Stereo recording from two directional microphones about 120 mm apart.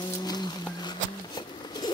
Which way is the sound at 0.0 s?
35° left (ahead or behind).